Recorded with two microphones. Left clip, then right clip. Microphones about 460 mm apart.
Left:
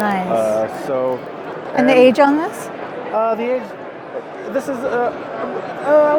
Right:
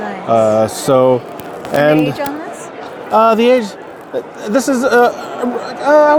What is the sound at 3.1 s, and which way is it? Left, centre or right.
Speech, right.